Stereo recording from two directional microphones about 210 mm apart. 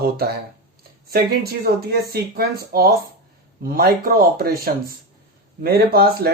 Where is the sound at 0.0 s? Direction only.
45° right (ahead or behind).